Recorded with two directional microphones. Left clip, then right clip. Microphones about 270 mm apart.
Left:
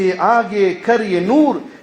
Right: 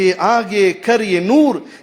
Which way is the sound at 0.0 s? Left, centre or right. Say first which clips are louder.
Even; right.